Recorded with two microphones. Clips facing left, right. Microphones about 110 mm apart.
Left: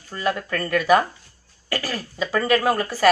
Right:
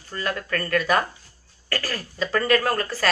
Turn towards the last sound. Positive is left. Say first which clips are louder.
# left 2 dB
turn(degrees=15)  # may be behind; listen again after turning